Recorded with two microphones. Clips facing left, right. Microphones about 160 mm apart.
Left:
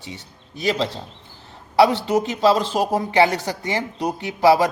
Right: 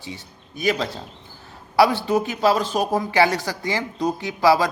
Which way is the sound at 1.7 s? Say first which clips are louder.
Left 1 dB; 25° left (ahead or behind).